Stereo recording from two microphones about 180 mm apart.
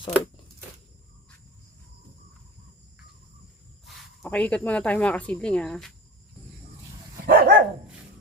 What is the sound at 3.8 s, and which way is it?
Speech, 5° left (ahead or behind).